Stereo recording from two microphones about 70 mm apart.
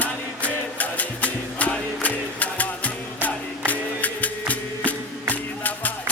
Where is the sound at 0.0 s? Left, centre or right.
Left.